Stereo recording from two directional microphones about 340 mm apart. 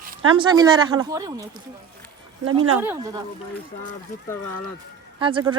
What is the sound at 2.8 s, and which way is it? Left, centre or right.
Speech, centre.